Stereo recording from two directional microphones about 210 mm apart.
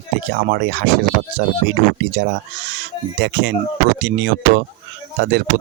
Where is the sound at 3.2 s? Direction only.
55° right (ahead or behind).